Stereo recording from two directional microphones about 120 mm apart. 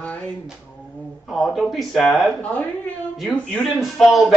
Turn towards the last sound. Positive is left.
turn(degrees=0)  # may be behind; listen again after turning